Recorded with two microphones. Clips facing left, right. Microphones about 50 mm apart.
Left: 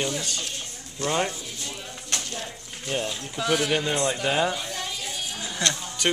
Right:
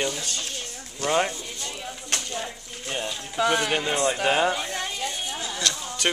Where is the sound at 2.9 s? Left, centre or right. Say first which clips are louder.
Left 2 dB; centre.